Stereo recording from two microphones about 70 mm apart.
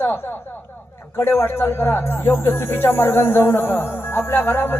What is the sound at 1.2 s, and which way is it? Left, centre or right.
Speech, left.